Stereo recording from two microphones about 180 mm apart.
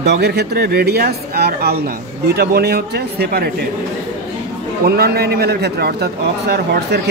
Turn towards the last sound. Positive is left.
turn(degrees=-65)  # may be behind; listen again after turning